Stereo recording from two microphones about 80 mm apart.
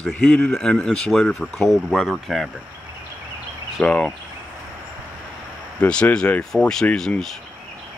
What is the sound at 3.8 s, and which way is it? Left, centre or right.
Speech, centre.